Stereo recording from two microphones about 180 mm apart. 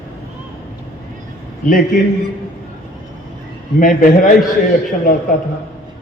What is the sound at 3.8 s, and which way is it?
Speech, 50° left (ahead or behind).